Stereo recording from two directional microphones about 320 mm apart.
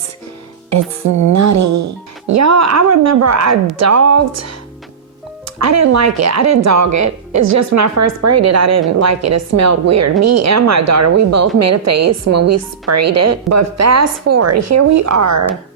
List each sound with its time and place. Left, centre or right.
0.7 s a woman's voice: right
5.5 s a woman's voice: right